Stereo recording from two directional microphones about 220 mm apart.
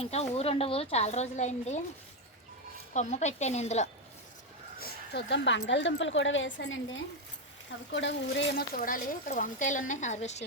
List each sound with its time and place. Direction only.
0.0 s a woman's voice: 30° left (ahead or behind)
2.9 s speech: 30° left (ahead or behind)
4.8 s a woman's voice: 45° left (ahead or behind); by 10.4 s 30° left (ahead or behind)